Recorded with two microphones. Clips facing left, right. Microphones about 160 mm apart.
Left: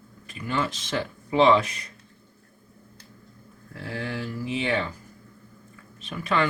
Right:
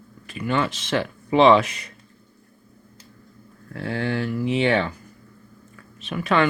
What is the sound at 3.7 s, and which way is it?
Speech, 65° right (ahead or behind).